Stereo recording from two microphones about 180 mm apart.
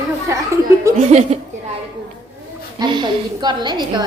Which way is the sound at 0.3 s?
15° right (ahead or behind).